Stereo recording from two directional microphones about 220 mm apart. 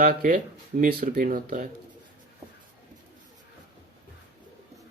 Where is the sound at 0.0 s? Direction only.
40° right (ahead or behind).